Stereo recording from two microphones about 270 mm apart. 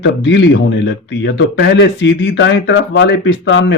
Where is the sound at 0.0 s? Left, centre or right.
Left.